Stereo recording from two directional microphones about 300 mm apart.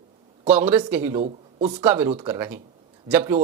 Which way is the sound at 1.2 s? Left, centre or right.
Right.